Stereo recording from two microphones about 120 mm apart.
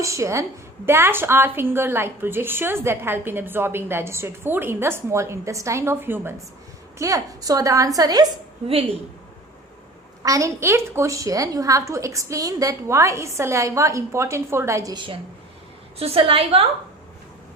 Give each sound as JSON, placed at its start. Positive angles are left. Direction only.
{"t": 0.0, "sound": "a woman's voice", "side_deg": -25}
{"t": 7.0, "sound": "a woman's voice", "side_deg": -30}
{"t": 10.2, "sound": "a woman's voice", "side_deg": -25}
{"t": 16.0, "sound": "a woman's voice", "side_deg": -50}